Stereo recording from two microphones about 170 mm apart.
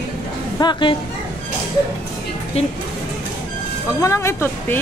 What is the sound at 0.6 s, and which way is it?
Speech, 25° left (ahead or behind).